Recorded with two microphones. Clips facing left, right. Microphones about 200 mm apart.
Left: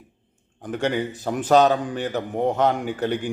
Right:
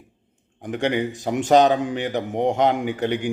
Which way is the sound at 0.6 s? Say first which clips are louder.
Right 1 dB; 15° right (ahead or behind).